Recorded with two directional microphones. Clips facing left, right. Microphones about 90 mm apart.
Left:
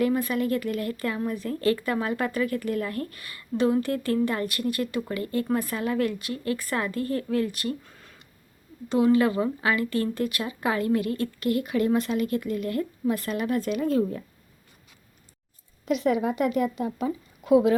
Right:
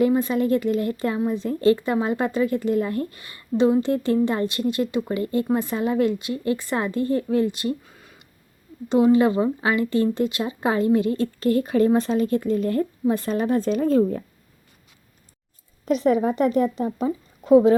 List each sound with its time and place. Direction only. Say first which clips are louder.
0.0 s speech: right 5 dB; 25° right (ahead or behind)
7.9 s a sound: right 2 dB; 5° right (ahead or behind)
8.9 s a woman's voice: right 4 dB; 20° right (ahead or behind)
15.9 s a woman's voice: right 4 dB; 35° right (ahead or behind)